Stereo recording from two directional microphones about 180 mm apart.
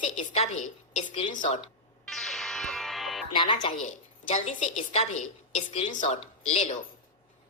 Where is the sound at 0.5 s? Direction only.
45° left (ahead or behind).